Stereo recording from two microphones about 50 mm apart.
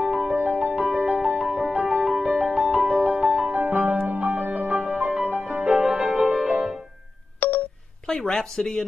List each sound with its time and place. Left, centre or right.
0.4 s music: right
3.4 s music: right
4.7 s music: centre
7.3 s telephone dialing: left
8.1 s speech: centre